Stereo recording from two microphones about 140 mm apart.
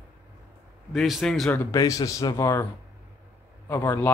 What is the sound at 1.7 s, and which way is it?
Speech, 25° left (ahead or behind).